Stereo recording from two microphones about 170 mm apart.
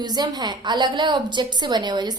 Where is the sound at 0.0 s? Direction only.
25° right (ahead or behind).